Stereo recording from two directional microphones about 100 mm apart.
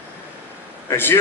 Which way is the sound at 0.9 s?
20° left (ahead or behind).